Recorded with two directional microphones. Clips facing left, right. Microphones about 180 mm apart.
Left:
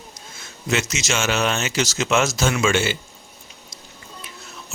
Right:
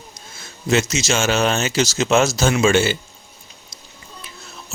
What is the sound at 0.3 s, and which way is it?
A man's voice, 35° right (ahead or behind).